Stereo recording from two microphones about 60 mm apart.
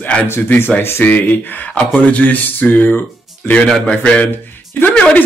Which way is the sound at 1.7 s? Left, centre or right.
Left.